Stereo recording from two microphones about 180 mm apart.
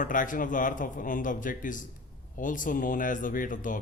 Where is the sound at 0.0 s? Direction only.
45° left (ahead or behind).